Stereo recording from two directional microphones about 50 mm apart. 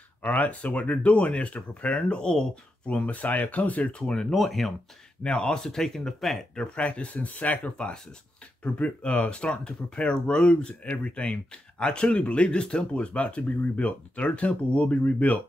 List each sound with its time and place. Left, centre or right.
0.2 s speech: left
4.0 s speech: centre
4.3 s speech: centre
5.2 s speech: centre
6.5 s speech: left